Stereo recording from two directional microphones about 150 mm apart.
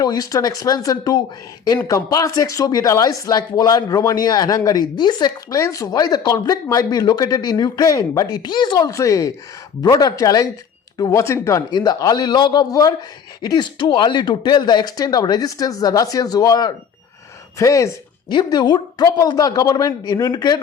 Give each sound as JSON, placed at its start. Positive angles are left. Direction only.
{"t": 0.0, "sound": "speech", "side_deg": 25}